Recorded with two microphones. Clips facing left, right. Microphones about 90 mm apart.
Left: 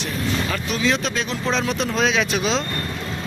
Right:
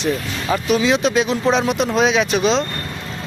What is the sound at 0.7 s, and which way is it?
Speech, 5° right (ahead or behind).